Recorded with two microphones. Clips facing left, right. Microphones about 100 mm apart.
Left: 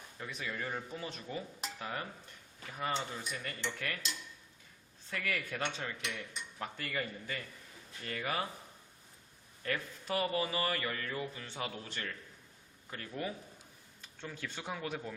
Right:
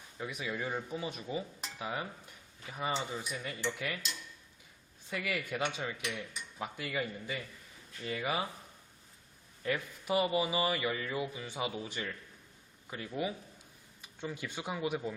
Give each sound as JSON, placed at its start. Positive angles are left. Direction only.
{"t": 0.2, "sound": "a man's voice", "side_deg": -10}
{"t": 5.1, "sound": "a man's voice", "side_deg": -10}
{"t": 9.6, "sound": "a man's voice", "side_deg": -10}